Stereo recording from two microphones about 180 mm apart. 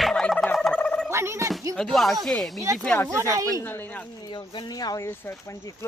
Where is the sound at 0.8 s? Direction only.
5° left (ahead or behind).